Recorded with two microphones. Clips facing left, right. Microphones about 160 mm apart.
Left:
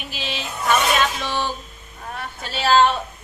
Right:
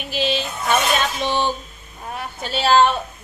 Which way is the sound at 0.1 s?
30° right (ahead or behind).